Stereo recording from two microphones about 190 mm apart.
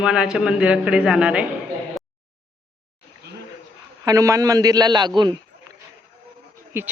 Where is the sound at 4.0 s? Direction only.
20° right (ahead or behind).